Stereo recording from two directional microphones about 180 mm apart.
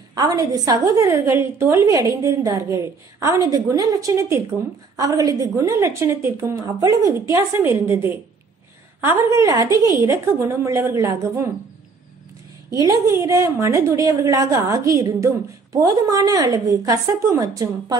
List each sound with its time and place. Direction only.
0.1 s a woman's voice: 20° right (ahead or behind)
12.7 s a woman's voice: 15° right (ahead or behind)